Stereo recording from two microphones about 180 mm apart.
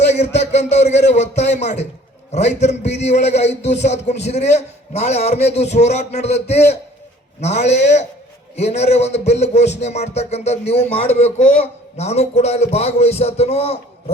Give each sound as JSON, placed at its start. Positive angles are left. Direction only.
{"t": 0.0, "sound": "a sound", "side_deg": 40}
{"t": 0.3, "sound": "speech", "side_deg": 40}
{"t": 2.3, "sound": "music", "side_deg": 40}